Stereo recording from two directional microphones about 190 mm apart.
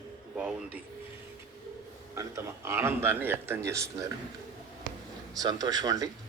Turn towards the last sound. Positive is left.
turn(degrees=-20)  # may be behind; listen again after turning